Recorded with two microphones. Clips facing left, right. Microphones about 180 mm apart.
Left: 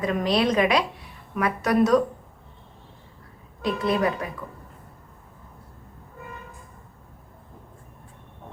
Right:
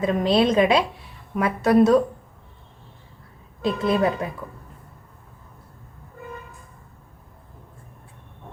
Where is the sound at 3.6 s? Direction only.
25° right (ahead or behind).